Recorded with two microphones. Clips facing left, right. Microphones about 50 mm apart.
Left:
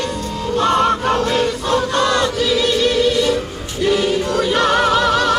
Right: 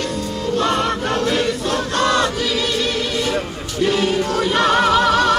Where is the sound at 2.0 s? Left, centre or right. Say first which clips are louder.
Left 1 dB; right.